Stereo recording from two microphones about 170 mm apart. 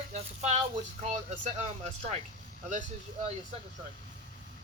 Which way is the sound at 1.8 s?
40° right (ahead or behind).